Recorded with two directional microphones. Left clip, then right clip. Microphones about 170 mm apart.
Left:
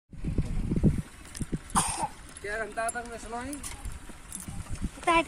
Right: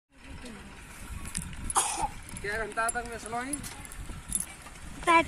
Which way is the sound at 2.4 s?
30° left (ahead or behind).